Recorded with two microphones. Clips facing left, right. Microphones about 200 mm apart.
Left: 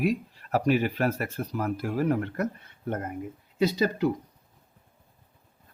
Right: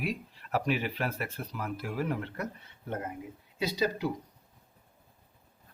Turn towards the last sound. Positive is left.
turn(degrees=55)  # may be behind; listen again after turning